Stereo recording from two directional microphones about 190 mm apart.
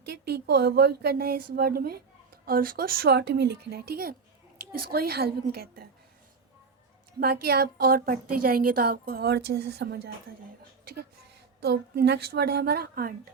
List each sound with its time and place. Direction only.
0.1 s a woman's voice: 60° right (ahead or behind)
7.2 s a woman's voice: 55° right (ahead or behind)
11.6 s a woman's voice: 60° right (ahead or behind)